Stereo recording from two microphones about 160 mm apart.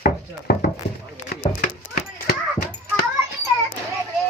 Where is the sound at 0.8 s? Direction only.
90° left.